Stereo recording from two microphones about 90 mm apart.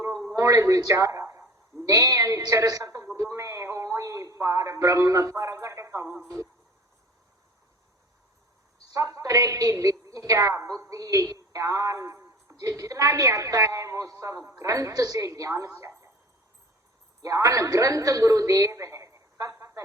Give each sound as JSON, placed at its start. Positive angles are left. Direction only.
{"t": 0.3, "sound": "a man's voice", "side_deg": -35}
{"t": 3.2, "sound": "a sound", "side_deg": -35}
{"t": 8.9, "sound": "a woman's voice", "side_deg": -35}
{"t": 17.2, "sound": "a woman's voice", "side_deg": -35}